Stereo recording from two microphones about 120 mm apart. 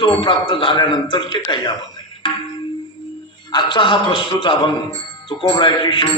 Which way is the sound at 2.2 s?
45° left (ahead or behind).